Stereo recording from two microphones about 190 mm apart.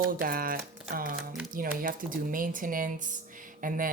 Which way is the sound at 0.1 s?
50° right (ahead or behind).